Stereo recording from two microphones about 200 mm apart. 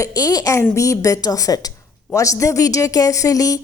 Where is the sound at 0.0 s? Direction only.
15° left (ahead or behind).